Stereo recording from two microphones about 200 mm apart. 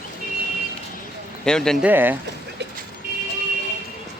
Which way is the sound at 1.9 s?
10° right (ahead or behind).